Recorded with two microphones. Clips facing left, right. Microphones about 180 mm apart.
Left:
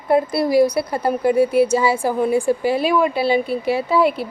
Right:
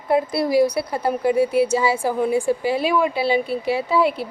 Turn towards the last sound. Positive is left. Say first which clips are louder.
# left 2 dB
turn(degrees=45)  # may be behind; listen again after turning